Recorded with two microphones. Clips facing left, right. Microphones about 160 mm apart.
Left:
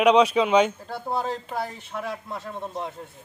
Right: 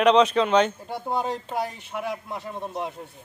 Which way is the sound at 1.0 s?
15° right (ahead or behind).